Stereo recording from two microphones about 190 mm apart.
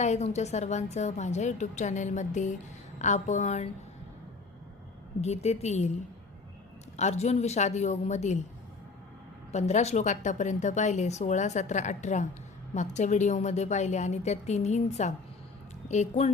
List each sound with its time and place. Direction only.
0.0 s a woman's voice: 35° left (ahead or behind)
5.2 s a woman's voice: 35° left (ahead or behind)
6.9 s a woman's voice: 35° left (ahead or behind)
9.5 s a woman's voice: 35° left (ahead or behind)